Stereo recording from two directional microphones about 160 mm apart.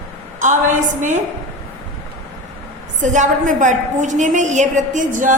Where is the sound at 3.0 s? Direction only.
50° right (ahead or behind).